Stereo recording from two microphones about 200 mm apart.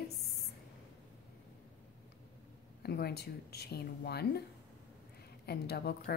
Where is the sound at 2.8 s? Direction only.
55° left (ahead or behind).